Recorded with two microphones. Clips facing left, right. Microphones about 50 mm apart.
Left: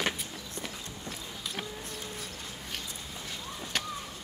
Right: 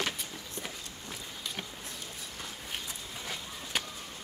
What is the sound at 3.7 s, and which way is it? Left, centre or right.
Chop, centre.